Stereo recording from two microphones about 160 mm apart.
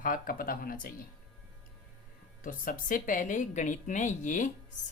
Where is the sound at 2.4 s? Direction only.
60° left (ahead or behind).